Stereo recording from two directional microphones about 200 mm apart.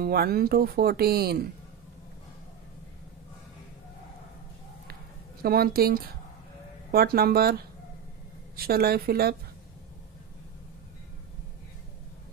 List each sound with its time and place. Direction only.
0.0 s speech: 50° right (ahead or behind)
5.4 s speech: 50° right (ahead or behind)
8.5 s speech: 50° right (ahead or behind)